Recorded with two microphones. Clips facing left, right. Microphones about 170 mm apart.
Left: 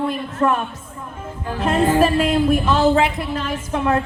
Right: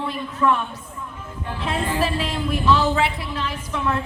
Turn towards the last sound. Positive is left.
turn(degrees=55)  # may be behind; listen again after turning